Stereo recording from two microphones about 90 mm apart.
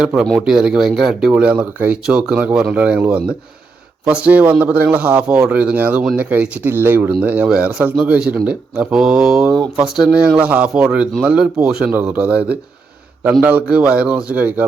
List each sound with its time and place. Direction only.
0.0 s speech: 5° right (ahead or behind)